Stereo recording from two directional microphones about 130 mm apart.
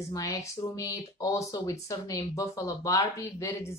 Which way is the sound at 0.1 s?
25° left (ahead or behind).